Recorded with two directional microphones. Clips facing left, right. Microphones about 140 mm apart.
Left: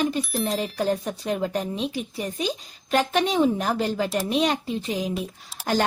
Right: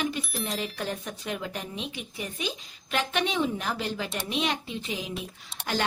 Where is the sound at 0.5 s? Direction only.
35° left (ahead or behind).